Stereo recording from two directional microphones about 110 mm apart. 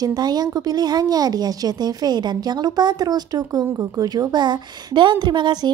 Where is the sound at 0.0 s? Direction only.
40° right (ahead or behind).